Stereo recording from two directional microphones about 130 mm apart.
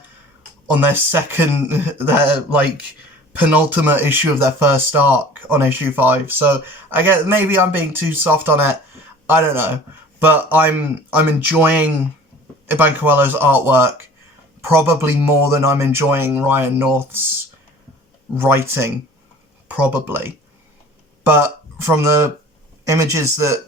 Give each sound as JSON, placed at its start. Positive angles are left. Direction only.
{"t": 0.8, "sound": "speech", "side_deg": -15}
{"t": 18.3, "sound": "speech", "side_deg": -15}